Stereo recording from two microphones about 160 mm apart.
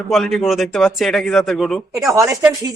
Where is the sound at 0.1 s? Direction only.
Centre (ahead or behind).